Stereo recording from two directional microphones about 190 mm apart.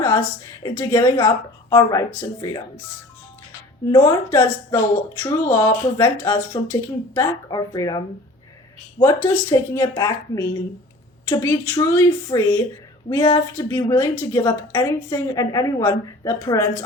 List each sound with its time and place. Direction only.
0.0 s a woman's voice: 15° left (ahead or behind)
3.9 s a woman's voice: 15° left (ahead or behind)